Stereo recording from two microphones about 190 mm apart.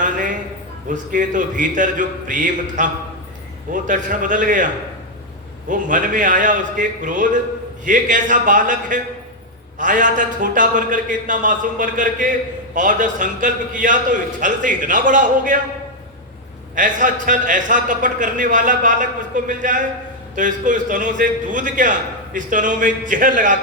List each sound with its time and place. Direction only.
0.0 s a sound: 45° right (ahead or behind)
0.9 s a man's voice: 45° right (ahead or behind)
16.7 s a man's voice: 45° right (ahead or behind)